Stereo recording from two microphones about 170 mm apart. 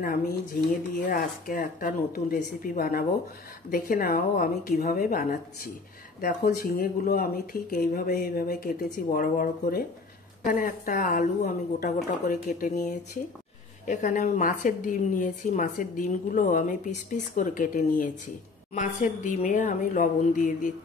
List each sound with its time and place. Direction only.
0.0 s a woman's voice: 60° left (ahead or behind)